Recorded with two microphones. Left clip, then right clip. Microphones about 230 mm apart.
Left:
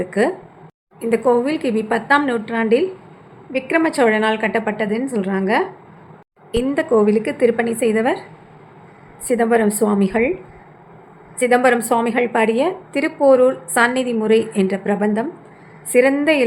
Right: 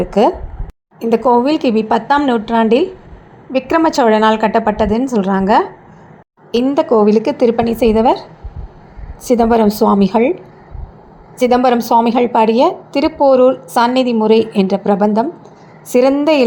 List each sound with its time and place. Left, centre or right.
0.0 s a woman's voice: centre
9.2 s a woman's voice: centre
11.3 s a woman's voice: centre